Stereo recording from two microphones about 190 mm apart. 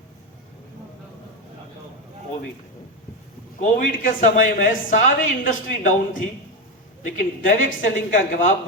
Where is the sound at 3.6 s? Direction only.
45° left (ahead or behind).